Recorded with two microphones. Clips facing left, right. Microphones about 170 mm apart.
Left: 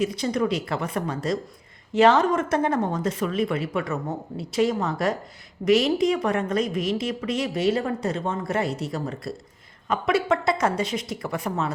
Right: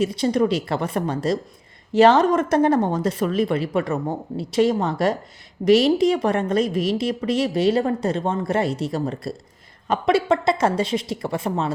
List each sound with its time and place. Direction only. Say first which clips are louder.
0.0 s a woman's voice: right 4 dB; 30° right (ahead or behind)